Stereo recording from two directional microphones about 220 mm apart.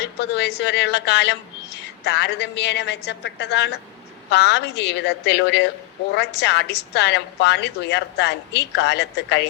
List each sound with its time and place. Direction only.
0.0 s a woman's voice: 50° left (ahead or behind)